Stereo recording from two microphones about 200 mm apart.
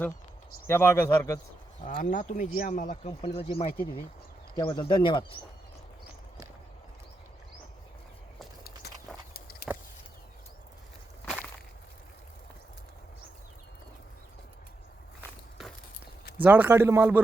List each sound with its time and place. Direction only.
0.7 s speech: 15° left (ahead or behind)
1.9 s speech: 40° left (ahead or behind)
4.5 s speech: 15° left (ahead or behind)
9.7 s a sound: centre (ahead or behind)
16.4 s speech: 10° right (ahead or behind)